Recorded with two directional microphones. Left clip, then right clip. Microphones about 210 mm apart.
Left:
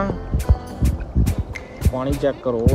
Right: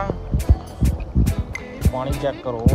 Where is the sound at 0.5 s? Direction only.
Centre (ahead or behind).